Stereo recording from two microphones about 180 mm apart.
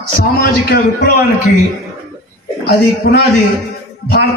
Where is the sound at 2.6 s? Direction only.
60° left (ahead or behind).